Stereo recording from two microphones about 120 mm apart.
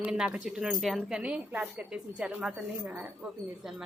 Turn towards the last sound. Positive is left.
turn(degrees=0)  # may be behind; listen again after turning